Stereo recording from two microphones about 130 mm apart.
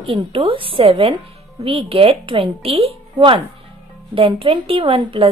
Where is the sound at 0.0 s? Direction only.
45° right (ahead or behind).